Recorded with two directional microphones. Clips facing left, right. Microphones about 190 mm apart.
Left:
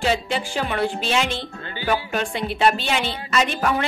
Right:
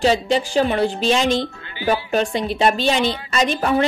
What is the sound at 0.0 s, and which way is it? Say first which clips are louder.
A woman's voice: right 5 dB; 35° right (ahead or behind).